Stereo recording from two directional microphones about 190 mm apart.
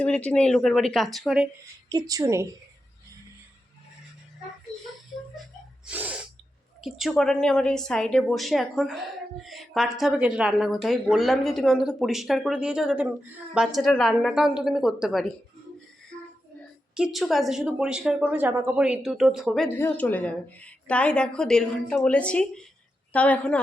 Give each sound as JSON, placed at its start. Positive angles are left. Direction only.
{"t": 0.0, "sound": "a woman's voice", "side_deg": 5}
{"t": 1.9, "sound": "a woman's voice", "side_deg": -20}
{"t": 5.8, "sound": "sneeze", "side_deg": -10}
{"t": 6.8, "sound": "a woman's voice", "side_deg": 0}
{"t": 16.9, "sound": "a woman's voice", "side_deg": -5}